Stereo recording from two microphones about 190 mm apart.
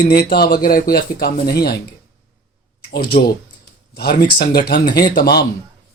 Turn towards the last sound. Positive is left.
turn(degrees=55)  # may be behind; listen again after turning